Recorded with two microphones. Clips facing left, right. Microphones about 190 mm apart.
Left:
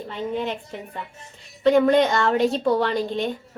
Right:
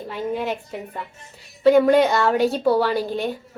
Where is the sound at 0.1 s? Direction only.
10° right (ahead or behind).